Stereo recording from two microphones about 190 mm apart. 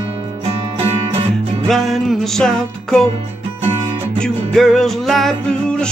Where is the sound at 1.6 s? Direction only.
Centre (ahead or behind).